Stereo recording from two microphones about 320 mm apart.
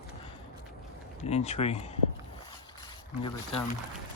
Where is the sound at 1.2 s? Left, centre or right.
Centre.